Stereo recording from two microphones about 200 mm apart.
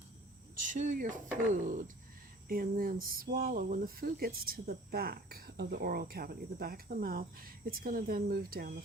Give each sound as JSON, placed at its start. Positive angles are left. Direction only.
{"t": 0.7, "sound": "speech", "side_deg": -40}